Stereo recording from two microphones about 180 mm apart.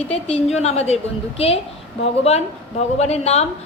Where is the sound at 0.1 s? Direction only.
35° left (ahead or behind).